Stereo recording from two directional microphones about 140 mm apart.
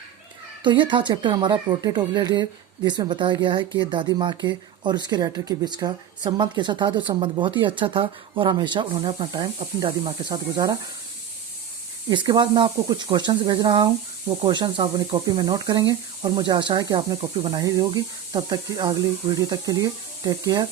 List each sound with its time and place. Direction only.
0.6 s speech: 35° right (ahead or behind)
12.0 s speech: 30° right (ahead or behind)